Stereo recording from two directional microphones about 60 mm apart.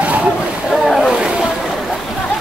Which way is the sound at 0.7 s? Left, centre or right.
Centre.